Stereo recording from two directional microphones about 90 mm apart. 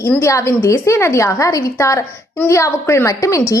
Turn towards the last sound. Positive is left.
turn(degrees=35)  # may be behind; listen again after turning